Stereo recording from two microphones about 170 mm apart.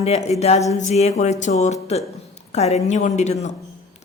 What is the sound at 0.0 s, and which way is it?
A woman's voice, 40° left (ahead or behind).